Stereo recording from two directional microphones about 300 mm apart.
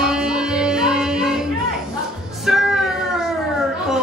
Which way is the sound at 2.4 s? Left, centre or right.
Centre.